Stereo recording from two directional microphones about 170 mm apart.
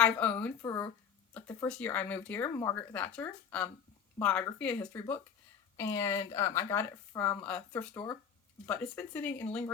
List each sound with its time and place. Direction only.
0.0 s speech: 10° left (ahead or behind)